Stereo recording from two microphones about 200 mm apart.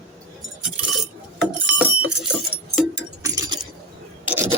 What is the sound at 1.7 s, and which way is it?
Vehicle, 10° right (ahead or behind).